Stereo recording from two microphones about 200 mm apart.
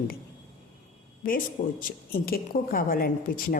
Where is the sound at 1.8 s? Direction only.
45° left (ahead or behind).